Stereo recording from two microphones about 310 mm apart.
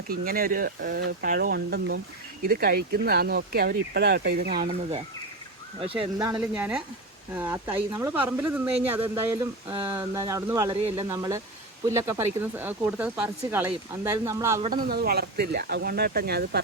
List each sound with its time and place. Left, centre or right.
0.1 s speech: right
4.7 s speech: centre
14.7 s speech: right